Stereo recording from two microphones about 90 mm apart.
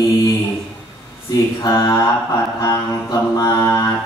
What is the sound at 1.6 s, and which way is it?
Mantra, 40° left (ahead or behind).